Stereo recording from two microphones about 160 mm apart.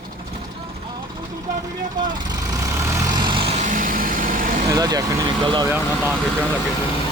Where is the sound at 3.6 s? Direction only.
55° right (ahead or behind).